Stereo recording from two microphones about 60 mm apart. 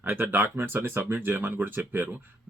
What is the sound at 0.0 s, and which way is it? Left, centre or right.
Speech, right.